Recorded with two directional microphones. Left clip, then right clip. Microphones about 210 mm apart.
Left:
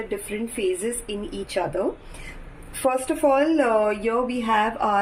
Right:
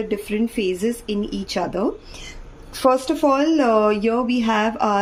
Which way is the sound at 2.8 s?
55° right (ahead or behind).